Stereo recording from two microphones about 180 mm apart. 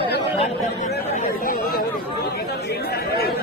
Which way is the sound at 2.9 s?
60° left (ahead or behind).